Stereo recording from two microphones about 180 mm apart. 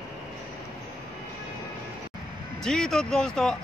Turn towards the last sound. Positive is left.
turn(degrees=5)  # may be behind; listen again after turning